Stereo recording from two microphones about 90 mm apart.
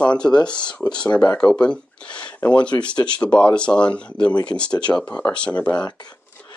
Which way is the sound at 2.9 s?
60° left (ahead or behind).